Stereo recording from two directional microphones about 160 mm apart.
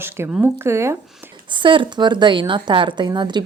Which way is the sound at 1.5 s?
30° right (ahead or behind).